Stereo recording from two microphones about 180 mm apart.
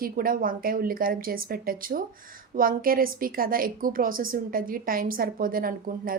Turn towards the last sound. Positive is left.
turn(degrees=-55)  # may be behind; listen again after turning